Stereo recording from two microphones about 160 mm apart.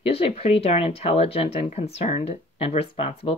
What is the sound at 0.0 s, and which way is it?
Speech, 35° left (ahead or behind).